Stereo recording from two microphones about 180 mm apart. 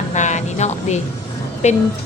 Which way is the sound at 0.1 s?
40° left (ahead or behind).